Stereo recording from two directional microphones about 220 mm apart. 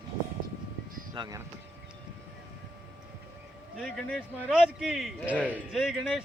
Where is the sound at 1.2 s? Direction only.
15° right (ahead or behind).